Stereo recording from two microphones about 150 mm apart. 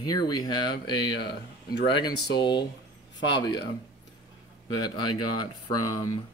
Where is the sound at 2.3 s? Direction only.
30° left (ahead or behind).